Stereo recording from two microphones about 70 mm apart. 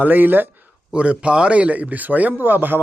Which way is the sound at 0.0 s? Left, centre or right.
Right.